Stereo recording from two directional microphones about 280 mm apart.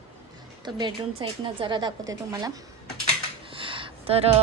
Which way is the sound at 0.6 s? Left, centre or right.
Centre.